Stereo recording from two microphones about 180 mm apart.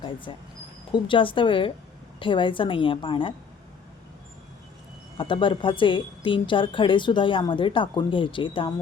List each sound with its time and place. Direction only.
0.3 s a woman's voice: 25° left (ahead or behind)
5.1 s a woman's voice: 30° left (ahead or behind)